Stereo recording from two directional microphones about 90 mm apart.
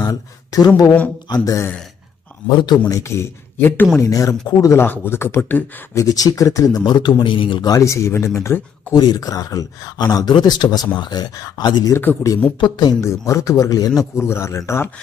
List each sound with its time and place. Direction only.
0.0 s speech: 45° left (ahead or behind)
0.8 s speech: 20° left (ahead or behind)
1.3 s speech: 40° left (ahead or behind)
2.4 s a man's voice: 55° left (ahead or behind)
2.9 s speech: 30° left (ahead or behind)
4.0 s speech: 40° left (ahead or behind)
4.7 s speech: 25° left (ahead or behind)
5.9 s speech: 40° left (ahead or behind); by 7.6 s 65° left (ahead or behind)
7.6 s speech: 40° left (ahead or behind)
8.9 s speech: 45° left (ahead or behind)
11.9 s speech: 20° left (ahead or behind)
12.5 s a man's voice: 55° left (ahead or behind)
13.0 s speech: 35° left (ahead or behind)
14.1 s speech: 30° left (ahead or behind)